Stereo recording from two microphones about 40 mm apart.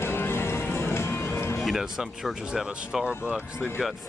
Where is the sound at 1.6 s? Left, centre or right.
Centre.